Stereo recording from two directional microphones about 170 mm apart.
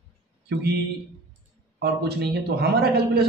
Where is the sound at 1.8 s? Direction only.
75° right (ahead or behind).